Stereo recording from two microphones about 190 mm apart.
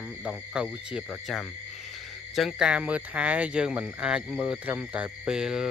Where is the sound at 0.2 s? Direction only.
5° right (ahead or behind).